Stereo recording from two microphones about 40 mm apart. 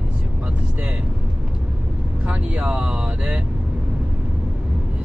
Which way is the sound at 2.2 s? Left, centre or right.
Right.